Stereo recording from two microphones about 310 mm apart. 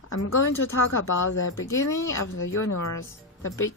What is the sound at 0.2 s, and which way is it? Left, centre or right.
Speech, left.